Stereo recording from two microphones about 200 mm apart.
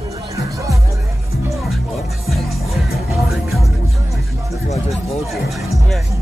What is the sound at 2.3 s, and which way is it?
Music, centre (ahead or behind).